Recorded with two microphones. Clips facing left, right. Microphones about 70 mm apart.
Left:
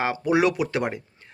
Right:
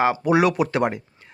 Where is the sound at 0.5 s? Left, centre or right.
Right.